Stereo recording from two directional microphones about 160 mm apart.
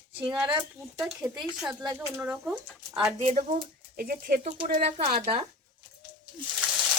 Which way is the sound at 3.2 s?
45° right (ahead or behind).